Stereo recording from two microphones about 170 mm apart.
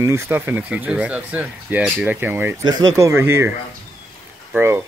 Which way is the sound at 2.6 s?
25° right (ahead or behind).